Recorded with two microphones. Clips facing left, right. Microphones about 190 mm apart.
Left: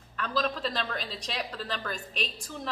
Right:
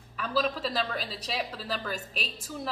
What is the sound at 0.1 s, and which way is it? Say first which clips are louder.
A woman's voice: right 1 dB; 5° right (ahead or behind).